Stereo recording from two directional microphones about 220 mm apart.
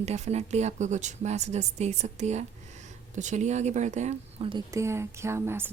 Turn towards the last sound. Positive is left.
turn(degrees=-10)  # may be behind; listen again after turning